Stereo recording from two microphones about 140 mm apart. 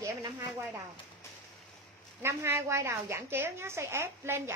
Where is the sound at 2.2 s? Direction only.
20° right (ahead or behind).